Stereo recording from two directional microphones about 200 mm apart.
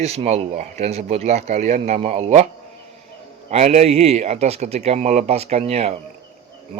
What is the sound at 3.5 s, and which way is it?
Speech, 35° right (ahead or behind).